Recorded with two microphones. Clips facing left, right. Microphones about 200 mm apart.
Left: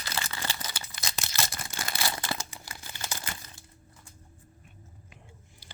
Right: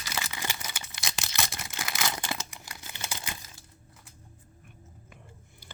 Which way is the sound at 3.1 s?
15° right (ahead or behind).